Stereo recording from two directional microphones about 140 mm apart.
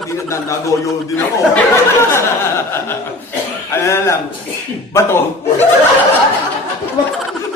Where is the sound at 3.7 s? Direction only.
20° left (ahead or behind).